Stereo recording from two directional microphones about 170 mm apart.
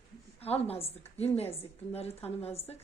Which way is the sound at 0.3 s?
35° left (ahead or behind).